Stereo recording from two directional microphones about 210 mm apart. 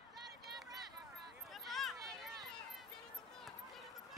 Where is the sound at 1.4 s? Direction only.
Centre (ahead or behind).